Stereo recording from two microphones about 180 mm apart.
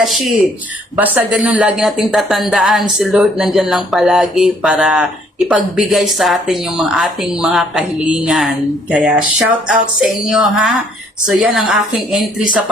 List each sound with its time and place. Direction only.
0.0 s speech: centre (ahead or behind)